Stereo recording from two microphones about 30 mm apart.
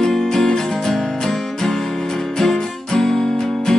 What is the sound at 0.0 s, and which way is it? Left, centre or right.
Music, centre.